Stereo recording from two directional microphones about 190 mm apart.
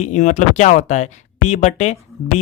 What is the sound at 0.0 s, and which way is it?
Speech, 40° left (ahead or behind).